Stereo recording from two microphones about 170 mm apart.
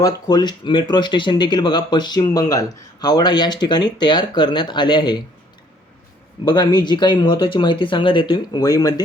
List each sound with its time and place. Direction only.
0.0 s speech: 25° left (ahead or behind)
6.4 s speech: 25° left (ahead or behind)